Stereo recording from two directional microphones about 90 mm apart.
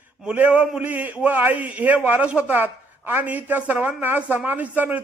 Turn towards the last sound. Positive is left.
turn(degrees=-15)  # may be behind; listen again after turning